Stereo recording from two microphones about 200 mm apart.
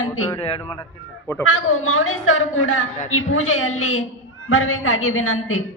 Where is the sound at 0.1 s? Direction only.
15° left (ahead or behind).